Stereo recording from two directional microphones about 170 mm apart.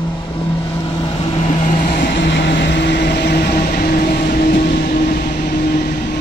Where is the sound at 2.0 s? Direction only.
90° left; by 5.9 s 55° left (ahead or behind).